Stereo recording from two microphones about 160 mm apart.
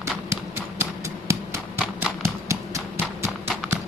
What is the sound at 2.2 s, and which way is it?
Clip-clop, 15° right (ahead or behind).